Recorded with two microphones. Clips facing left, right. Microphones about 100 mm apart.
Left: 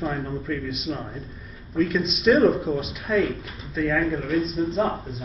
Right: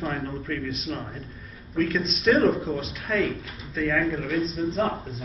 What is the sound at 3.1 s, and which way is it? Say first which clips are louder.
Speech: left 3 dB; centre (ahead or behind).